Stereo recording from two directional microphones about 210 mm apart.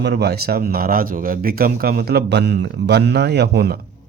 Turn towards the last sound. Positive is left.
turn(degrees=-50)  # may be behind; listen again after turning